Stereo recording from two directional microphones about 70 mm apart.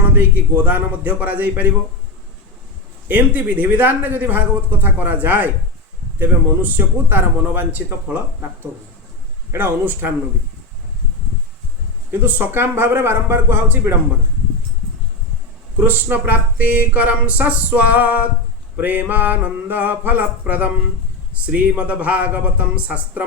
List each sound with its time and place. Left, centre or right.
0.1 s speech: right
3.1 s speech: right
9.5 s speech: right
12.1 s speech: right
15.8 s speech: right